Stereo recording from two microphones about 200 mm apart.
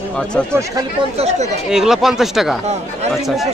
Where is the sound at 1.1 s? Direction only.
30° right (ahead or behind).